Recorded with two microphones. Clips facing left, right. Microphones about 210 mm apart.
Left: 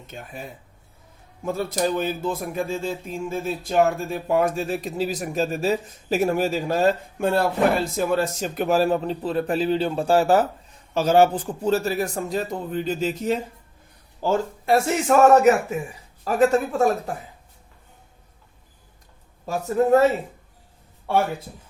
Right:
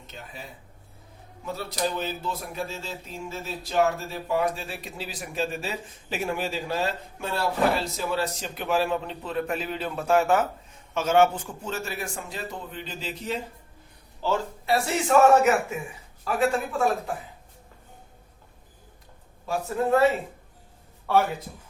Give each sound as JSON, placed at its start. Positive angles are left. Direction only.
{"t": 0.1, "sound": "speech", "side_deg": 50}
{"t": 1.5, "sound": "a man's voice", "side_deg": 50}
{"t": 19.5, "sound": "speech", "side_deg": 40}